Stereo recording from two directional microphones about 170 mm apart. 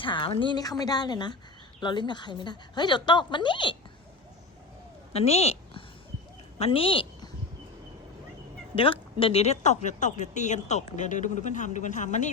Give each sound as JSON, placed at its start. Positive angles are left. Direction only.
{"t": 0.0, "sound": "a woman's voice", "side_deg": 30}
{"t": 5.1, "sound": "a woman's voice", "side_deg": 35}
{"t": 8.7, "sound": "speech", "side_deg": 30}